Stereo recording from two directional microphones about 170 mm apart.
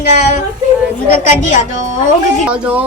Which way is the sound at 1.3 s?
45° left (ahead or behind).